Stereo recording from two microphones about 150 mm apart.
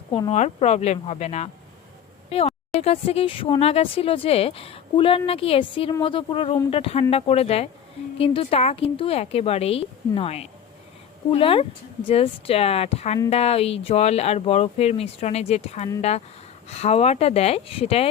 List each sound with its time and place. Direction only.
0.3 s speech: 50° left (ahead or behind)